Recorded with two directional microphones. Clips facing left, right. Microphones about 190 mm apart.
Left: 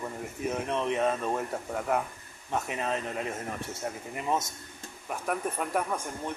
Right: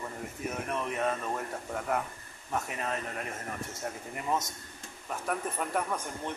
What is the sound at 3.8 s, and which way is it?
Speech, 20° left (ahead or behind).